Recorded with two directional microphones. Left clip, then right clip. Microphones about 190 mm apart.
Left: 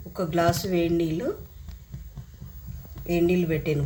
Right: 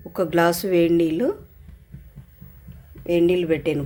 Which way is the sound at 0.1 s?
50° right (ahead or behind).